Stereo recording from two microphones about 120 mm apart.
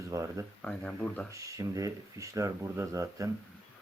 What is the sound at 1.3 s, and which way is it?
Speech, 25° right (ahead or behind).